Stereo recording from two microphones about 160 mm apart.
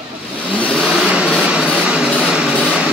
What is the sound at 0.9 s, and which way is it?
Vehicle, 5° right (ahead or behind).